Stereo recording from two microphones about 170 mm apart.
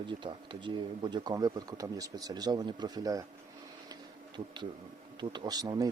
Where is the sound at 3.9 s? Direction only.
25° right (ahead or behind).